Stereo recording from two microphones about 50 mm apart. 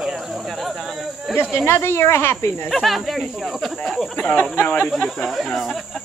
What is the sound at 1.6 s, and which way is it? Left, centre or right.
Speech, left.